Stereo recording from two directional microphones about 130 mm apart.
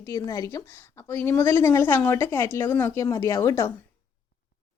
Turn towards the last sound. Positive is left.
turn(degrees=25)  # may be behind; listen again after turning